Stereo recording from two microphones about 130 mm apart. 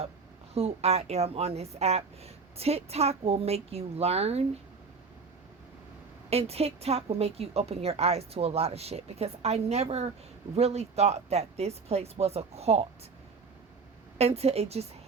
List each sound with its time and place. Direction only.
0.5 s a woman's voice: 55° right (ahead or behind)
6.3 s a woman's voice: 50° right (ahead or behind)
14.2 s a woman's voice: 55° right (ahead or behind)